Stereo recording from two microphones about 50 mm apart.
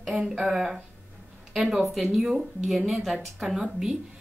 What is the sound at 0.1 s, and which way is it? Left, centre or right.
Speech, centre.